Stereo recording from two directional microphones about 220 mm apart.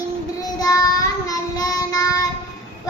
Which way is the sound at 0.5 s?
15° left (ahead or behind).